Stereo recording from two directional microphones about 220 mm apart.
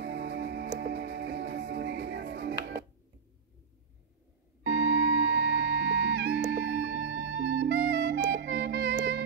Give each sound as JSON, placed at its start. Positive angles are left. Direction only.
{"t": 0.0, "sound": "music", "side_deg": -50}
{"t": 5.2, "sound": "music", "side_deg": -50}